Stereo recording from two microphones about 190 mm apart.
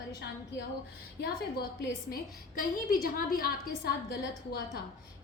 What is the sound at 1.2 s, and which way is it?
A woman's voice, 55° left (ahead or behind).